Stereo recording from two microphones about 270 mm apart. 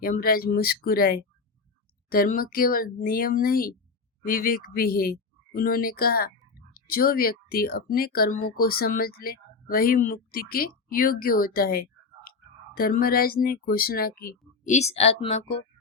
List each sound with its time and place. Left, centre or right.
0.0 s speech: left